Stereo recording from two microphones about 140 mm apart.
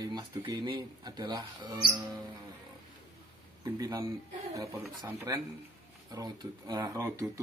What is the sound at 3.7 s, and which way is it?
Speech, 20° right (ahead or behind).